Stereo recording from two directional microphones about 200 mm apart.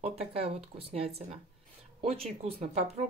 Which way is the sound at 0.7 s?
30° right (ahead or behind).